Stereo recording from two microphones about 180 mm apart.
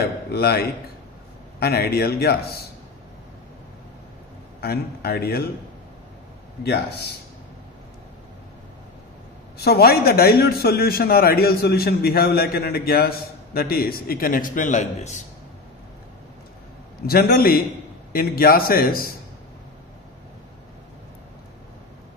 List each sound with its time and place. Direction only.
0.3 s a man's voice: 60° left (ahead or behind)
4.6 s a man's voice: 60° left (ahead or behind)
6.6 s a man's voice: 65° left (ahead or behind)
9.6 s a man's voice: 60° left (ahead or behind); by 15.2 s 40° left (ahead or behind)
17.0 s a man's voice: 55° left (ahead or behind)